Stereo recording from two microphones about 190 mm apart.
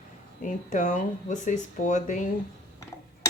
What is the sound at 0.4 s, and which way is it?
Speech, 40° left (ahead or behind).